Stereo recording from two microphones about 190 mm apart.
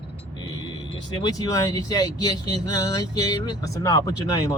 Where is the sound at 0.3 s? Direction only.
20° left (ahead or behind).